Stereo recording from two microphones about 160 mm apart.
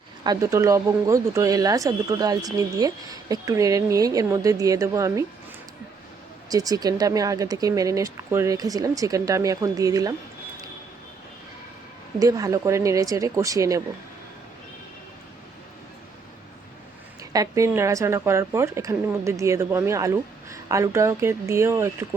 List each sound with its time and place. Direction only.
0.3 s speech: 20° right (ahead or behind)
6.5 s speech: 25° right (ahead or behind)
12.2 s speech: 20° right (ahead or behind)
17.3 s speech: 20° right (ahead or behind)